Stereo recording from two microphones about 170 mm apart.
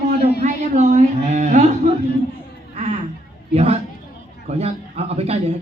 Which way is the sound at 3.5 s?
35° right (ahead or behind).